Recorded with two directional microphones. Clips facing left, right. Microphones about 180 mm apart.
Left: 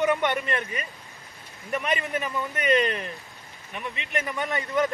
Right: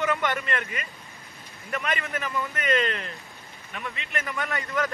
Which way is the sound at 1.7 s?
15° left (ahead or behind).